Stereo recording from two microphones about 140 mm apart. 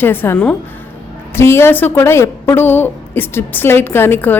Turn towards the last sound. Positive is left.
turn(degrees=15)  # may be behind; listen again after turning